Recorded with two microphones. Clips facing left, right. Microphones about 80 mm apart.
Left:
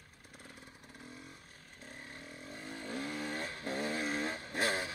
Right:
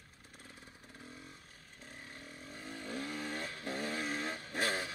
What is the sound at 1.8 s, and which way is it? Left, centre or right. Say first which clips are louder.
Vehicle: left 2 dB; left.